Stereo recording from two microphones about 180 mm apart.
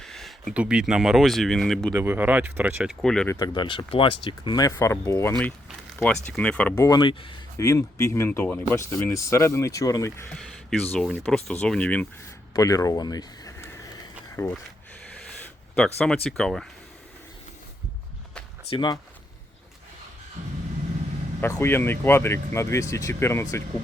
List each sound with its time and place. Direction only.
0.0 s a sound: centre (ahead or behind)
0.5 s speech: 5° right (ahead or behind)
1.9 s speech: 10° right (ahead or behind)
3.0 s speech: 5° left (ahead or behind)
3.2 s speech: 20° left (ahead or behind)
10.3 s a sound: centre (ahead or behind)
10.9 s speech: 5° left (ahead or behind)
12.5 s speech: 20° left (ahead or behind)
16.0 s speech: 5° left (ahead or behind)
18.7 s speech: 25° left (ahead or behind)
21.4 s speech: 15° left (ahead or behind)